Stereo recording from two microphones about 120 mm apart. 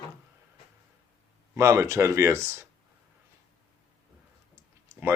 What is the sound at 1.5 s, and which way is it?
Speech, 25° right (ahead or behind).